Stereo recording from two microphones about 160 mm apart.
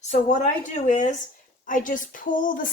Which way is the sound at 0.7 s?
50° left (ahead or behind).